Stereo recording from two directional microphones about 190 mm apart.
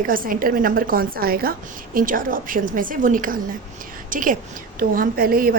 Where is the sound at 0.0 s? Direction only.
50° right (ahead or behind).